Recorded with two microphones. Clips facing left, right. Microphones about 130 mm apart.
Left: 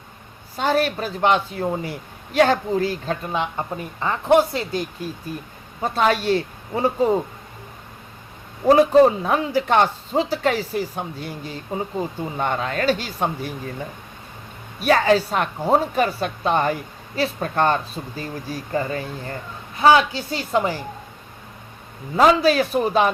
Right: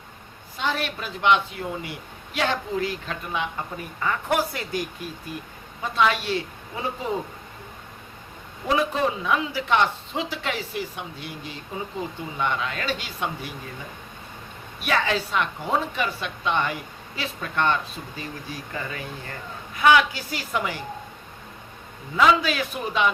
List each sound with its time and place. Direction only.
0.5 s a man's voice: 40° left (ahead or behind)
5.8 s a man's voice: 40° left (ahead or behind)
8.6 s a man's voice: 40° left (ahead or behind)
22.1 s a man's voice: 40° left (ahead or behind)